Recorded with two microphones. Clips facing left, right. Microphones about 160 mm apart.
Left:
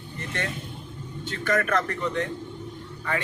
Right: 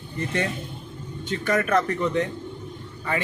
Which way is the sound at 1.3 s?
15° right (ahead or behind).